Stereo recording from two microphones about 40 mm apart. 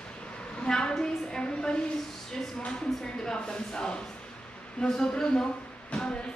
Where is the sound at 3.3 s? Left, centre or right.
Centre.